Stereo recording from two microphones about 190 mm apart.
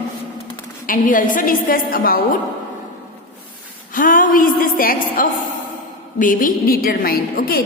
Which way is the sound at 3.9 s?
45° left (ahead or behind).